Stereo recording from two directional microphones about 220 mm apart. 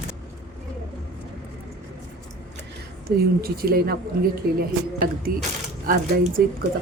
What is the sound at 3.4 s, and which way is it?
Speech, 45° right (ahead or behind).